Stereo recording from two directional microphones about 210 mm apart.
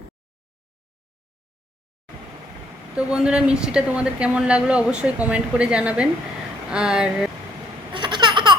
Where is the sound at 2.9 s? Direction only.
5° right (ahead or behind).